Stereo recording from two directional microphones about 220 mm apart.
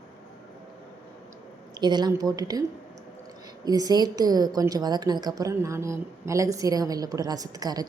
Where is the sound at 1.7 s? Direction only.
20° right (ahead or behind).